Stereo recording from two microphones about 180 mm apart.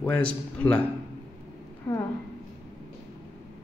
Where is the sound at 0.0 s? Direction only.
5° left (ahead or behind).